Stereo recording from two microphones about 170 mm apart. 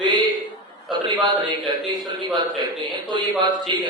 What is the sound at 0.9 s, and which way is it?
Speech, 25° right (ahead or behind).